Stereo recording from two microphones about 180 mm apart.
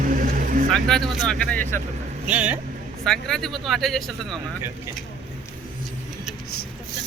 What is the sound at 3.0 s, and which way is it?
Speech, 5° left (ahead or behind).